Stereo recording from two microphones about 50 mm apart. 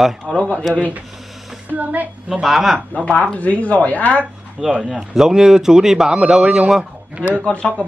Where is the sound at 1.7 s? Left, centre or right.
Right.